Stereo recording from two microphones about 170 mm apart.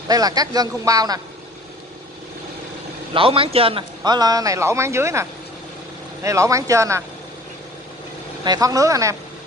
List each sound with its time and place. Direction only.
0.1 s a man's voice: 20° right (ahead or behind)
3.1 s a man's voice: 30° right (ahead or behind)
8.5 s a man's voice: 20° right (ahead or behind)